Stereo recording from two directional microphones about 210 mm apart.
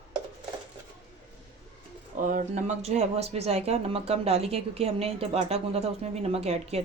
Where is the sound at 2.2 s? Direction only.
40° right (ahead or behind).